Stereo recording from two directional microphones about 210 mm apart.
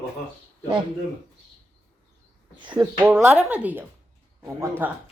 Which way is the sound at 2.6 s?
20° right (ahead or behind).